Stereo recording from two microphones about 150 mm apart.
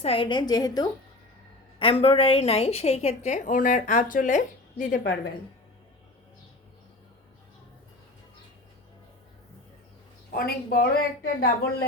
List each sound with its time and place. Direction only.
0.0 s a woman's voice: 40° left (ahead or behind)
1.8 s a woman's voice: 40° left (ahead or behind); by 4.9 s 55° left (ahead or behind)
10.3 s speech: 90° left